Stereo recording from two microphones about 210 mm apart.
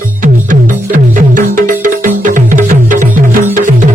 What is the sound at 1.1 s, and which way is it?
Music, 40° right (ahead or behind).